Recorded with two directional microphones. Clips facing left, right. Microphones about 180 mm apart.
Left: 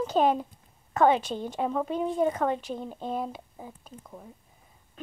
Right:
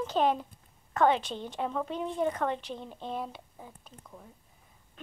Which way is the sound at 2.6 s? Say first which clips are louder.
Left 5 dB; 45° left (ahead or behind).